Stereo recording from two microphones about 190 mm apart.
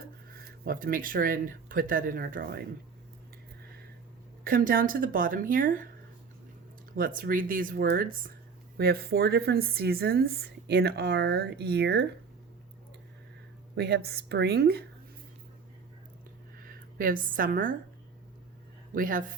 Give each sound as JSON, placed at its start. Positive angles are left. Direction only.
{"t": 0.6, "sound": "speech", "side_deg": -50}
{"t": 4.4, "sound": "speech", "side_deg": -50}
{"t": 6.9, "sound": "speech", "side_deg": -45}
{"t": 13.7, "sound": "speech", "side_deg": -60}
{"t": 16.6, "sound": "speech", "side_deg": -45}
{"t": 18.9, "sound": "speech", "side_deg": -45}